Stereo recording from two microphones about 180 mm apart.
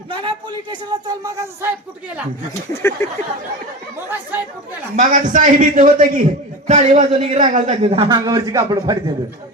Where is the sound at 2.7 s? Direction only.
15° left (ahead or behind).